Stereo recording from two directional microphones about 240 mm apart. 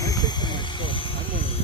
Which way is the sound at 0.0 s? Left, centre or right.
Centre.